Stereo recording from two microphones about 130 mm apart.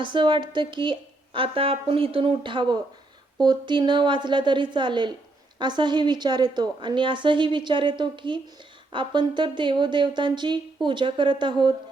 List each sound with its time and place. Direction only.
0.0 s a woman's voice: 35° right (ahead or behind)